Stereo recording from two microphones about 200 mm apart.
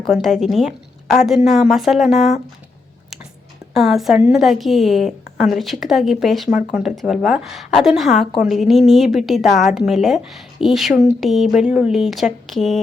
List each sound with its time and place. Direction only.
0.2 s a woman's voice: centre (ahead or behind)
3.8 s a woman's voice: centre (ahead or behind)